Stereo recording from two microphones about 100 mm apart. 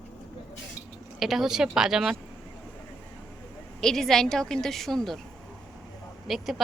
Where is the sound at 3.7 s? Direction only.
5° left (ahead or behind).